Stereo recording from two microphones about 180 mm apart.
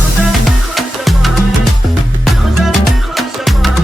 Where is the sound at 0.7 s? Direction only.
Centre (ahead or behind).